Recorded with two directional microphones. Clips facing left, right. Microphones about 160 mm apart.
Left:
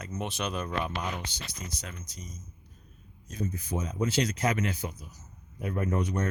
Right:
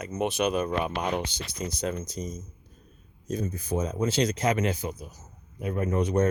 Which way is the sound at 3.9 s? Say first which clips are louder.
Right 1 dB; 30° right (ahead or behind).